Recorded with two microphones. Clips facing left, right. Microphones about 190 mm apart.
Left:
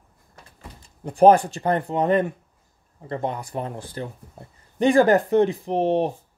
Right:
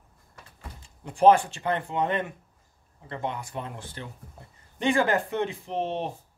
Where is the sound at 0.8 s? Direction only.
40° left (ahead or behind).